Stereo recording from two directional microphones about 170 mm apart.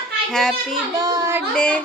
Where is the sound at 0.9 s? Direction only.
20° right (ahead or behind).